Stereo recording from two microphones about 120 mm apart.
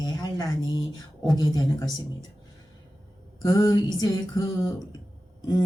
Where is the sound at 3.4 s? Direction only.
30° left (ahead or behind).